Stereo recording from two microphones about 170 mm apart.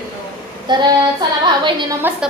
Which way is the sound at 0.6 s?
25° right (ahead or behind).